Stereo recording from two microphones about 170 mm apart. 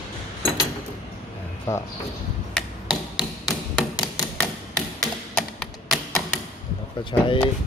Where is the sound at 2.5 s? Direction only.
Centre (ahead or behind).